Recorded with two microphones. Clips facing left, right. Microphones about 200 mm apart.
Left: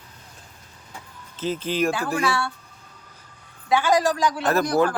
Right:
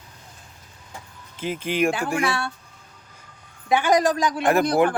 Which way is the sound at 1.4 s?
15° right (ahead or behind).